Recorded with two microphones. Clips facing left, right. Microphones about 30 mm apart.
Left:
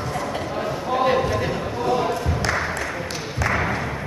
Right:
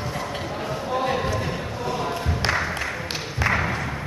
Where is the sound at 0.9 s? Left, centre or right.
Centre.